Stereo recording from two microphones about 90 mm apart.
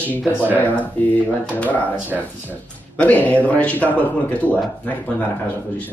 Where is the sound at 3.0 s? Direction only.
15° left (ahead or behind).